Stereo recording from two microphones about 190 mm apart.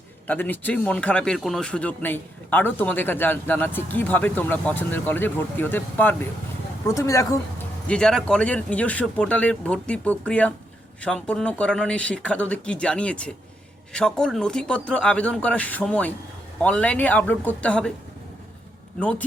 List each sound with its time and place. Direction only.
0.3 s a man's voice: 10° left (ahead or behind)
7.9 s a man's voice: 5° left (ahead or behind)